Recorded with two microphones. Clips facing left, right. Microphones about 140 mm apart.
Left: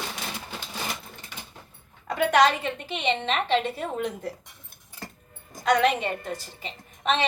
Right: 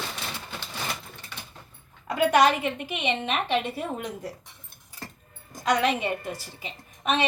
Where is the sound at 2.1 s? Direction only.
10° right (ahead or behind).